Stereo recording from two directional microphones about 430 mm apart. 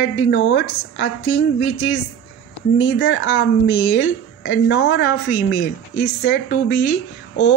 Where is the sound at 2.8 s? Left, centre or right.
Left.